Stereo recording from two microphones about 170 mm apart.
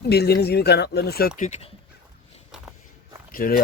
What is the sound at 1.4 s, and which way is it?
Speech, 40° left (ahead or behind).